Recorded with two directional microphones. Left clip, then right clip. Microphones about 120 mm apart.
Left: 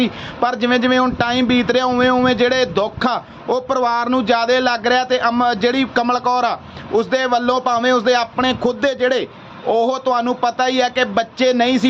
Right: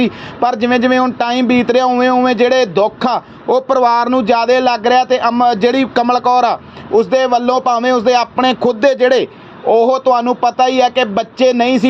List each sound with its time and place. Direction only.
0.0 s a man's voice: 30° right (ahead or behind)
3.5 s a man's voice: 40° right (ahead or behind)
4.1 s a man's voice: 25° right (ahead or behind)
8.4 s a man's voice: 40° right (ahead or behind)